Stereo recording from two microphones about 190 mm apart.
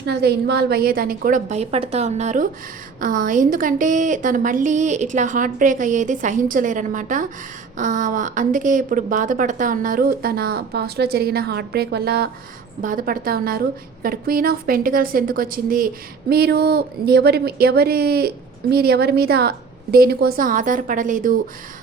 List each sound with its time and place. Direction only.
0.0 s a woman's voice: 60° right (ahead or behind)
12.8 s a woman's voice: 45° right (ahead or behind)